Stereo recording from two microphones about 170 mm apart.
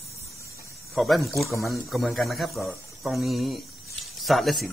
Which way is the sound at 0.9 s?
Centre (ahead or behind).